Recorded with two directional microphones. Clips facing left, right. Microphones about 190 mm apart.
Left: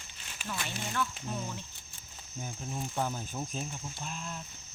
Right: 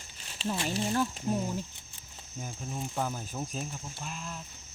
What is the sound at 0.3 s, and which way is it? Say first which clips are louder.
Speech: right 7 dB; 30° right (ahead or behind).